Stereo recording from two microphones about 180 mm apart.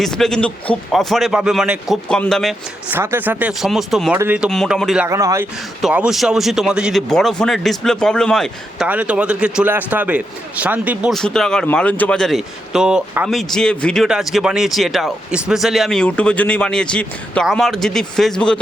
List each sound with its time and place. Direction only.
0.0 s a man's voice: 5° left (ahead or behind)
2.9 s speech: 10° right (ahead or behind)
4.4 s a man's voice: centre (ahead or behind)
5.0 s speech: 15° right (ahead or behind)
5.8 s a man's voice: 5° right (ahead or behind)